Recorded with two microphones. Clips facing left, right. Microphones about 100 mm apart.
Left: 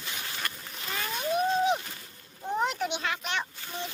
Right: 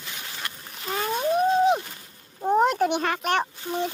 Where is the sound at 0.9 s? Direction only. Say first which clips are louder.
Right 6 dB; 35° right (ahead or behind).